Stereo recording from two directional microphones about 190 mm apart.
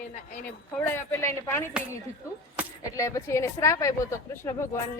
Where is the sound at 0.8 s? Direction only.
10° left (ahead or behind).